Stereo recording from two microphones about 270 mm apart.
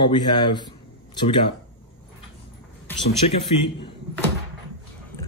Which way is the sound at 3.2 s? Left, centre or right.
Left.